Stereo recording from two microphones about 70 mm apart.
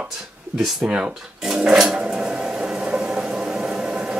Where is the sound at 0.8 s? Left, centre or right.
Centre.